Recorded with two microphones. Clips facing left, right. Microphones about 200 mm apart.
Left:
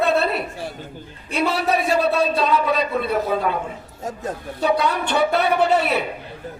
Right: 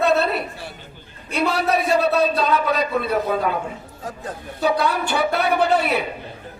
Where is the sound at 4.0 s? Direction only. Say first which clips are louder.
Left 4 dB; 25° left (ahead or behind).